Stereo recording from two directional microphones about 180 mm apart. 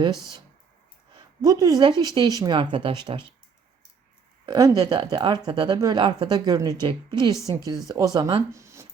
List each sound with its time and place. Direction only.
1.4 s speech: 20° right (ahead or behind)
4.4 s speech: 20° right (ahead or behind)